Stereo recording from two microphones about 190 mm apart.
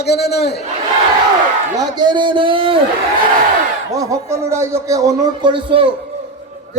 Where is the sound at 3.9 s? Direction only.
15° right (ahead or behind).